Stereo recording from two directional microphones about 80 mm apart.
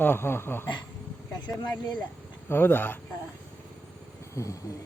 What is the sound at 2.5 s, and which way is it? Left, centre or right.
Speech, left.